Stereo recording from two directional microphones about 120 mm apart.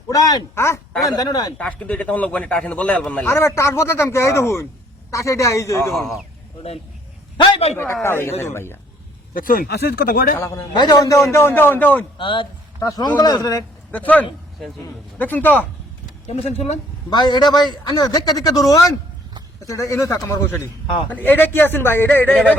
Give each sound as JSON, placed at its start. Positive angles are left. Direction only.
{"t": 0.1, "sound": "a man's voice", "side_deg": 30}
{"t": 1.5, "sound": "speech", "side_deg": 10}
{"t": 3.2, "sound": "speech", "side_deg": 20}
{"t": 5.9, "sound": "a man's voice", "side_deg": 0}
{"t": 7.3, "sound": "a man's voice", "side_deg": 45}
{"t": 8.0, "sound": "speech", "side_deg": 20}
{"t": 10.3, "sound": "speech", "side_deg": 25}
{"t": 12.1, "sound": "a man's voice", "side_deg": 45}
{"t": 13.9, "sound": "speech", "side_deg": 15}
{"t": 16.2, "sound": "speech", "side_deg": 65}
{"t": 17.1, "sound": "a man's voice", "side_deg": 35}